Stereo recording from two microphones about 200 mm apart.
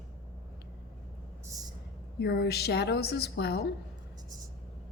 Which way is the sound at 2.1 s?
55° left (ahead or behind).